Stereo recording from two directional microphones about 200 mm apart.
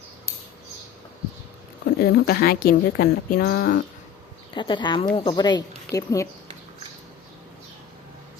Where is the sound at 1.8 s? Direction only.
50° left (ahead or behind).